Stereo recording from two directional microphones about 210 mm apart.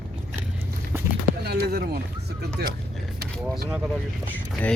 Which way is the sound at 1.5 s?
50° right (ahead or behind).